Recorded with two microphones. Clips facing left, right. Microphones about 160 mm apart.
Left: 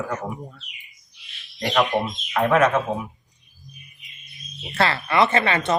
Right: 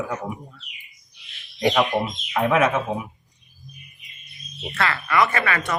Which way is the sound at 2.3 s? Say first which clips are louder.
Left 1 dB; 5° right (ahead or behind).